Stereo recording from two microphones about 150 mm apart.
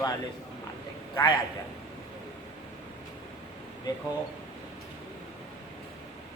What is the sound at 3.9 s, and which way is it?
Speech, 25° left (ahead or behind).